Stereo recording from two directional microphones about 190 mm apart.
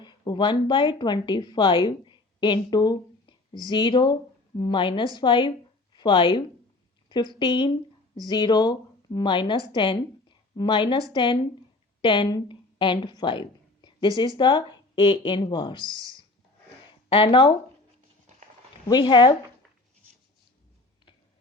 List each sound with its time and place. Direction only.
0.0 s a woman's voice: 25° left (ahead or behind)
15.8 s speech: 20° right (ahead or behind)
17.1 s a woman's voice: 30° left (ahead or behind)
18.9 s a woman's voice: 25° left (ahead or behind)